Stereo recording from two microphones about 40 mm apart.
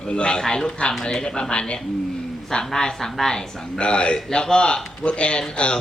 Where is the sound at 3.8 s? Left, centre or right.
Left.